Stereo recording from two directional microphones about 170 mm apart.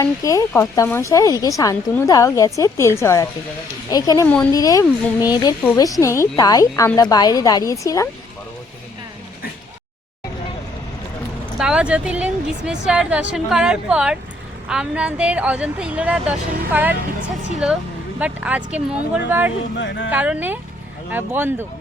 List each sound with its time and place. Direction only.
0.0 s speech: 20° left (ahead or behind)
11.6 s a woman's voice: 5° right (ahead or behind)
19.8 s speech: 90° left
20.1 s a woman's voice: 10° right (ahead or behind)